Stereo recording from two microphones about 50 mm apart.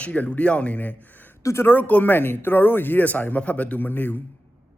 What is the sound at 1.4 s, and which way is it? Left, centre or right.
Speech, left.